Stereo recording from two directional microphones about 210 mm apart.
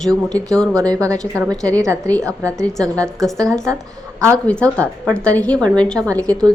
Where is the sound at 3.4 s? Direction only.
5° left (ahead or behind).